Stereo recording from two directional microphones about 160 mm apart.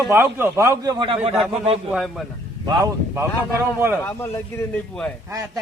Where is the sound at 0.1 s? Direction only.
15° right (ahead or behind).